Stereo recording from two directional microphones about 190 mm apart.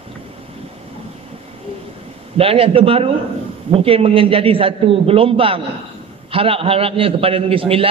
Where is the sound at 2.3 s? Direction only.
30° right (ahead or behind).